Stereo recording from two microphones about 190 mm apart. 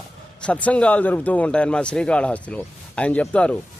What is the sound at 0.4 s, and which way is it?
A man's voice, 5° left (ahead or behind).